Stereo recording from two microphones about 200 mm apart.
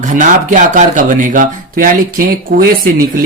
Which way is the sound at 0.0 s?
40° right (ahead or behind).